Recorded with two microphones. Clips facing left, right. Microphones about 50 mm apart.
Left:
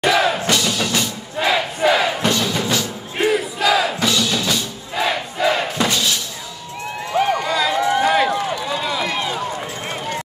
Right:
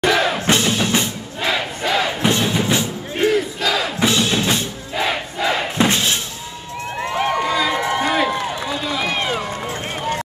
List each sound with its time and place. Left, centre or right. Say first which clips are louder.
0.0 s music: even; centre
0.5 s music: right 2 dB; right
1.4 s battle cry: left 4 dB; centre
2.2 s music: right 1 dB; right
3.2 s crowd: even; centre
4.0 s music: right 2 dB; right
4.9 s crowd: left 1 dB; centre
5.9 s music: right 1 dB; right
7.2 s run: left 1 dB; centre
9.0 s run: right 1 dB; right